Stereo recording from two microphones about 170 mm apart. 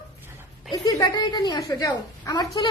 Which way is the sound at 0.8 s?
20° left (ahead or behind).